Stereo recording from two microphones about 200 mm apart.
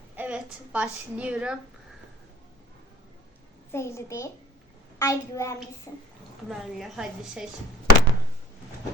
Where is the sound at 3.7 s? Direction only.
15° left (ahead or behind).